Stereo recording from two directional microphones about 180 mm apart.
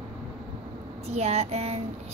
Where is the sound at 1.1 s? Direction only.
35° right (ahead or behind).